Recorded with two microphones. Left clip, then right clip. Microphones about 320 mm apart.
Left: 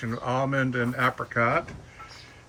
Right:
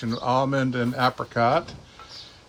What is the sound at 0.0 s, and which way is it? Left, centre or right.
Speech, centre.